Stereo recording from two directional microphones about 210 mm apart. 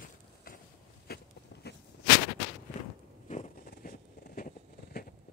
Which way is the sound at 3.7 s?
45° left (ahead or behind).